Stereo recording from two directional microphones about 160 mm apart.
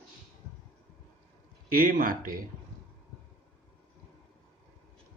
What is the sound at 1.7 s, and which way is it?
Speech, 60° right (ahead or behind).